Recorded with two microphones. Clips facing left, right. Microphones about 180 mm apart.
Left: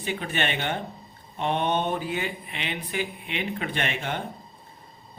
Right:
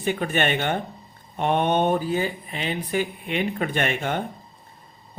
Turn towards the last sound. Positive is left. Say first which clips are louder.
# right 5 dB
turn(degrees=-50)  # may be behind; listen again after turning